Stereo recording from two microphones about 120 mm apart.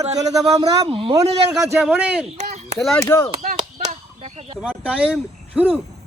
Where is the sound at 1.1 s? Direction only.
30° right (ahead or behind).